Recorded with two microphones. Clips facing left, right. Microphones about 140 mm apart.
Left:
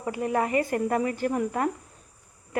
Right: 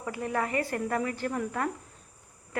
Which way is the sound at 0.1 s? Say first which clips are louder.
Left 5 dB; 20° left (ahead or behind).